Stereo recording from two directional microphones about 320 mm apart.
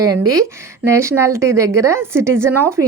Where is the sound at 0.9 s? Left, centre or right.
Centre.